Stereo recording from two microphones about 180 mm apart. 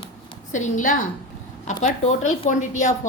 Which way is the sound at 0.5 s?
45° left (ahead or behind).